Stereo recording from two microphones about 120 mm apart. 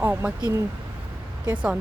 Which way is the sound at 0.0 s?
20° right (ahead or behind).